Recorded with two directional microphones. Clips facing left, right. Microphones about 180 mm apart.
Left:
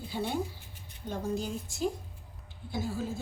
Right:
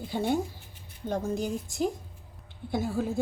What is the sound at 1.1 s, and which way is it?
Chopping, 55° right (ahead or behind).